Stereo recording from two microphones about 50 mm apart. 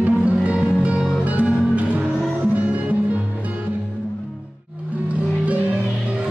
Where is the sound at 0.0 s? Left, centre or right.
Right.